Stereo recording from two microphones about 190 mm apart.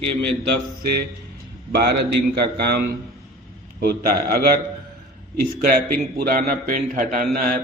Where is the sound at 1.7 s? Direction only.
55° right (ahead or behind).